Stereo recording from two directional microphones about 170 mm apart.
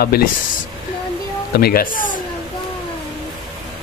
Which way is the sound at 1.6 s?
60° left (ahead or behind).